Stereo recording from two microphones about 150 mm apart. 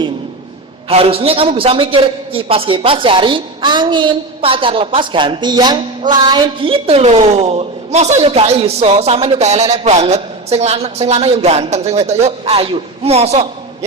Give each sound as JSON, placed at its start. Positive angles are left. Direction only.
{"t": 0.9, "sound": "a man's voice", "side_deg": -40}